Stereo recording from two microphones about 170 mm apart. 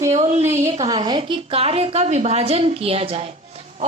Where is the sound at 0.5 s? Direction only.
40° right (ahead or behind).